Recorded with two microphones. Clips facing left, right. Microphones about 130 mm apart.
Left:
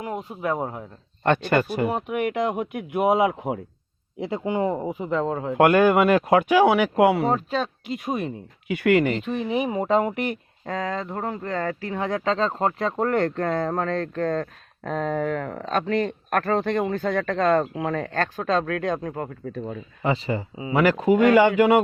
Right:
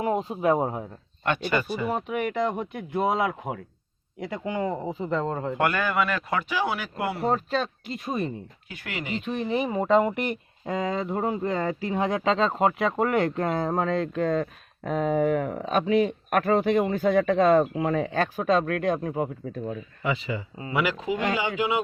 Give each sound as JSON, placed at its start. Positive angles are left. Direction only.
{"t": 0.0, "sound": "speech", "side_deg": -25}
{"t": 1.5, "sound": "speech", "side_deg": 55}
{"t": 1.9, "sound": "speech", "side_deg": 5}
{"t": 5.1, "sound": "speech", "side_deg": 5}
{"t": 5.5, "sound": "speech", "side_deg": 50}
{"t": 7.3, "sound": "speech", "side_deg": 5}
{"t": 8.6, "sound": "speech", "side_deg": 65}
{"t": 9.2, "sound": "speech", "side_deg": 0}
{"t": 20.0, "sound": "speech", "side_deg": 35}